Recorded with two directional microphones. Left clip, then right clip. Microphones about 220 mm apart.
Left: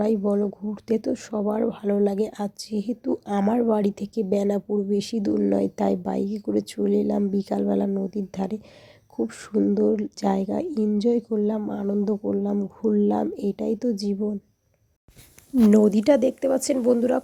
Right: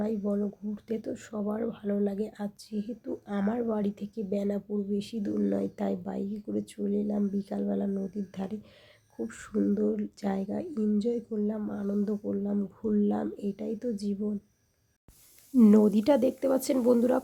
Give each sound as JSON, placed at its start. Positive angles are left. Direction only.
{"t": 0.0, "sound": "speech", "side_deg": 30}
{"t": 15.7, "sound": "speech", "side_deg": 15}